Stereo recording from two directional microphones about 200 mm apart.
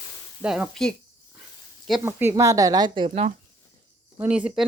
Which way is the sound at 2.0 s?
10° right (ahead or behind).